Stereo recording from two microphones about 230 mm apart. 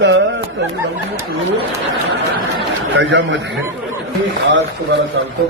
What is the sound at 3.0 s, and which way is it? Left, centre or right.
Speech, right.